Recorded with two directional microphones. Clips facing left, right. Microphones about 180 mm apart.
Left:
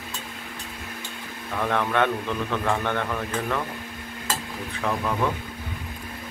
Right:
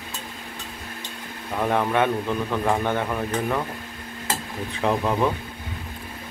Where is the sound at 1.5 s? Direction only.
15° right (ahead or behind).